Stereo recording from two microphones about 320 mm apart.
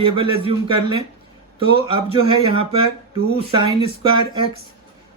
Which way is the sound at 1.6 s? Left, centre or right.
Centre.